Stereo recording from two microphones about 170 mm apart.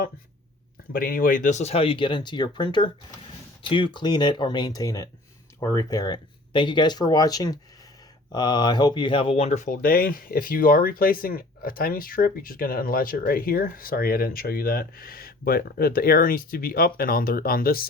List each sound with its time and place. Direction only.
0.9 s speech: 55° left (ahead or behind)